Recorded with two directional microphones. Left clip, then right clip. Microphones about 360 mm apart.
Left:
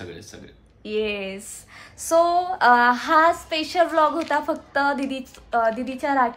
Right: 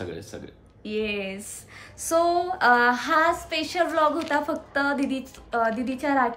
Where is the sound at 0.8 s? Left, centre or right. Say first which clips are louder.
Left 3 dB; centre.